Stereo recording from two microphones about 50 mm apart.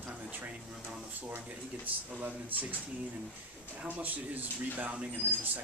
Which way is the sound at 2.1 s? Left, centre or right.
Right.